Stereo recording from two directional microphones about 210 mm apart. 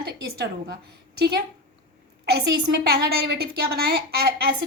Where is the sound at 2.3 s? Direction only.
50° right (ahead or behind).